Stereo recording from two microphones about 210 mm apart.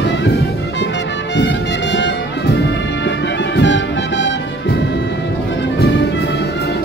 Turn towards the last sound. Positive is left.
turn(degrees=55)  # may be behind; listen again after turning